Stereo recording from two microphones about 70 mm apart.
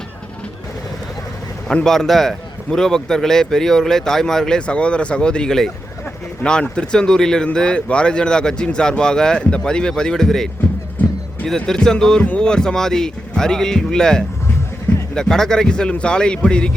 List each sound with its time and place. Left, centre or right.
1.6 s speech: centre
12.2 s speech: left
12.5 s speech: centre